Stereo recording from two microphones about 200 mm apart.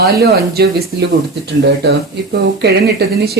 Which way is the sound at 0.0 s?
50° right (ahead or behind).